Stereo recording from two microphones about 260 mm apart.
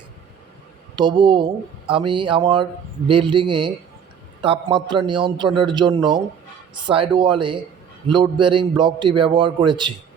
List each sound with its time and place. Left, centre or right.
0.9 s a man's voice: centre